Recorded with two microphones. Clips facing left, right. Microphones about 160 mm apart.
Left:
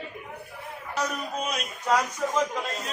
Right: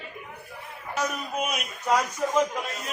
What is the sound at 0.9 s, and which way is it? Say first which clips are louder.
A man's voice: right 1 dB; 5° right (ahead or behind).